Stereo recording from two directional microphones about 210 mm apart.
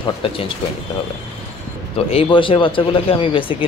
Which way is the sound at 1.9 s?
25° left (ahead or behind).